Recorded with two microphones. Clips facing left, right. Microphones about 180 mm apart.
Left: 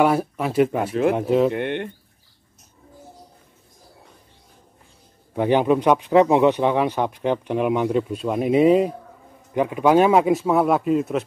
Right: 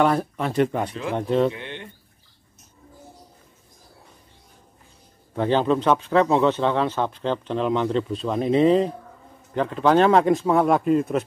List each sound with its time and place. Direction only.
0.0 s speech: 5° left (ahead or behind)
1.5 s speech: 60° left (ahead or behind)
5.3 s speech: 15° left (ahead or behind)